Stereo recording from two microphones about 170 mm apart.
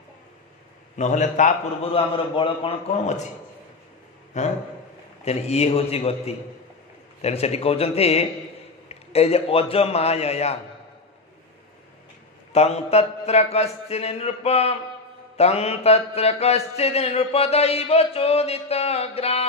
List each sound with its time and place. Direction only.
0.9 s a man's voice: 45° left (ahead or behind)
2.0 s mantra: 30° left (ahead or behind)
4.4 s mantra: 40° left (ahead or behind)
12.5 s mantra: 40° left (ahead or behind)